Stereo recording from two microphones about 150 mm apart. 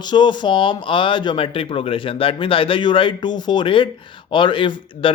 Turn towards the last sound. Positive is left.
turn(degrees=35)  # may be behind; listen again after turning